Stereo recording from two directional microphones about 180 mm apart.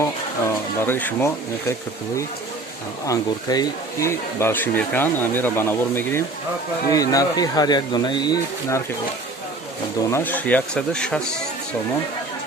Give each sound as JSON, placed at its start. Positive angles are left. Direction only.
{"t": 0.0, "sound": "speech", "side_deg": 15}
{"t": 3.1, "sound": "speech", "side_deg": 20}
{"t": 10.1, "sound": "speech", "side_deg": 10}